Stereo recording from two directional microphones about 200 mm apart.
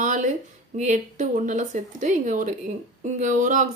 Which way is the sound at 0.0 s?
40° right (ahead or behind).